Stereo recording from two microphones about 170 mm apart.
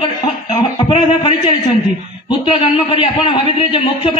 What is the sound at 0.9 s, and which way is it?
A man's voice, 35° left (ahead or behind).